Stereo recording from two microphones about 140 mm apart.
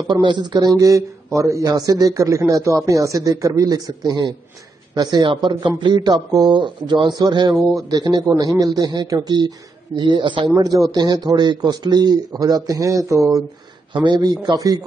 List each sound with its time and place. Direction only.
0.1 s speech: 30° right (ahead or behind)